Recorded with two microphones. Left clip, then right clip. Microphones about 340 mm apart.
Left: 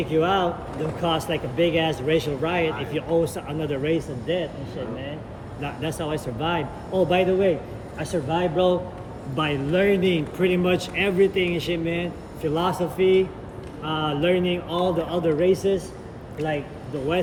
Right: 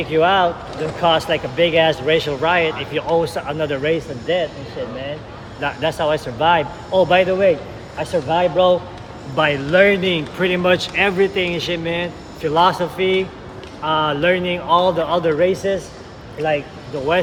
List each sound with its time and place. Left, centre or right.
0.0 s speech: centre
5.5 s speech: centre
14.8 s speech: right
15.1 s speech: centre